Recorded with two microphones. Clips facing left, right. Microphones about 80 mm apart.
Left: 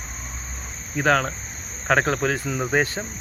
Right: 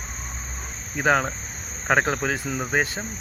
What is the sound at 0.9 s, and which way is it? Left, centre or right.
Speech, centre.